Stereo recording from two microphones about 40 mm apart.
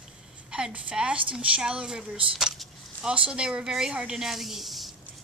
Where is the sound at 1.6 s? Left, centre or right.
Right.